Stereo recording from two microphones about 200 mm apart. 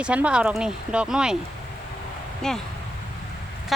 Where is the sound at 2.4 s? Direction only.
Centre (ahead or behind).